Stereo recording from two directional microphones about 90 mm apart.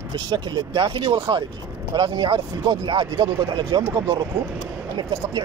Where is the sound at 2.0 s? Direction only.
55° right (ahead or behind).